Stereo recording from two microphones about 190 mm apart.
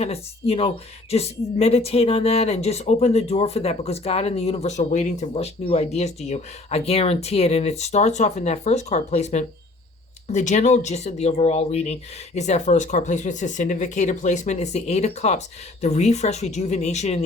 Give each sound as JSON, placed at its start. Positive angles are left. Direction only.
{"t": 0.0, "sound": "speech", "side_deg": 30}